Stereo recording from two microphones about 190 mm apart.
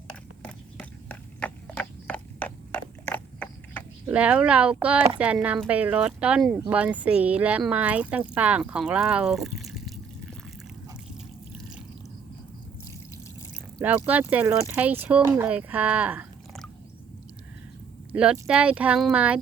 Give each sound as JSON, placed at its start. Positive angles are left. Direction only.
{"t": 0.1, "sound": "a sound", "side_deg": 5}
{"t": 4.0, "sound": "speech", "side_deg": -5}
{"t": 13.7, "sound": "speech", "side_deg": -10}
{"t": 18.1, "sound": "speech", "side_deg": -5}